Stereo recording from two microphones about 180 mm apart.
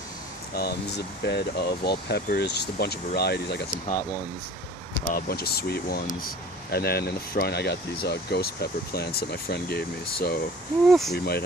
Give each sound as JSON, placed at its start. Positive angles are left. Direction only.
{"t": 0.5, "sound": "speech", "side_deg": 60}
{"t": 5.1, "sound": "speech", "side_deg": 60}
{"t": 10.8, "sound": "speech", "side_deg": 0}
{"t": 11.1, "sound": "speech", "side_deg": 60}